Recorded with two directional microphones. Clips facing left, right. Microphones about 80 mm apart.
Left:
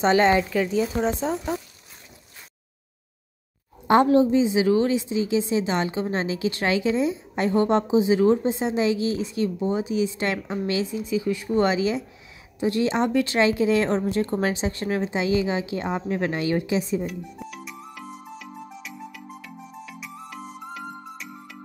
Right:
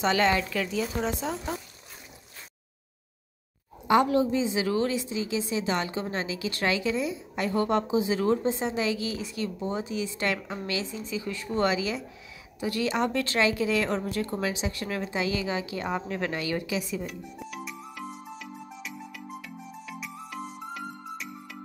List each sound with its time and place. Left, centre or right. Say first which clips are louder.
0.0 s a woman's voice: left 5 dB; left
3.8 s a woman's voice: left 5 dB; left
17.0 s music: left 5 dB; centre